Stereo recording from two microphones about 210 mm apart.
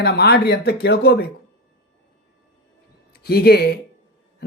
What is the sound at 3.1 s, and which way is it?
Speech, 50° left (ahead or behind).